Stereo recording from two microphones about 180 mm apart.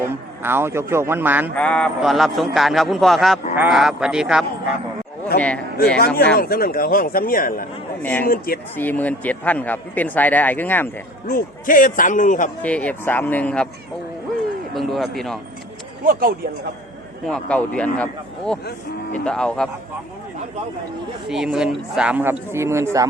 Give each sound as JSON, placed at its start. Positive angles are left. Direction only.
{"t": 0.0, "sound": "speech", "side_deg": -10}
{"t": 1.5, "sound": "a man's voice", "side_deg": 5}
{"t": 5.3, "sound": "a man's voice", "side_deg": 60}
{"t": 8.0, "sound": "speech", "side_deg": 10}
{"t": 11.3, "sound": "speech", "side_deg": 50}
{"t": 12.6, "sound": "speech", "side_deg": 10}
{"t": 14.8, "sound": "a man's voice", "side_deg": 0}
{"t": 17.2, "sound": "a man's voice", "side_deg": 5}
{"t": 21.2, "sound": "speech", "side_deg": -5}